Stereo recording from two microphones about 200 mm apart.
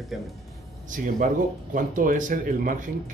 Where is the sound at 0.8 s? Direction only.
40° right (ahead or behind).